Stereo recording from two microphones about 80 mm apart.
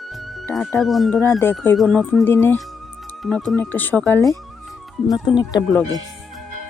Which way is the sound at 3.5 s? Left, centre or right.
Left.